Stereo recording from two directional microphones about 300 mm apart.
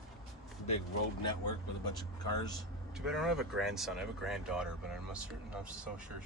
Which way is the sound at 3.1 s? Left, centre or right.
Centre.